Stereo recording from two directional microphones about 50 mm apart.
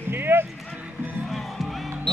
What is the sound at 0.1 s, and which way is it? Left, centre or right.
Run, right.